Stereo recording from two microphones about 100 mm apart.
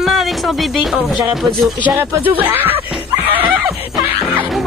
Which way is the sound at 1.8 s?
15° right (ahead or behind).